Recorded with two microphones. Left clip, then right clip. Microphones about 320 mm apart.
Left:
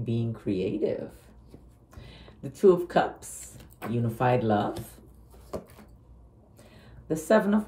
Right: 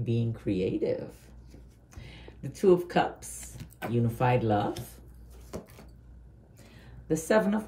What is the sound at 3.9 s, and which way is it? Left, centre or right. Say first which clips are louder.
Speech: left 2 dB; centre.